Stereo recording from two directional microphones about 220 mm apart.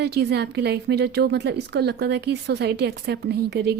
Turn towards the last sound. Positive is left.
turn(degrees=-45)  # may be behind; listen again after turning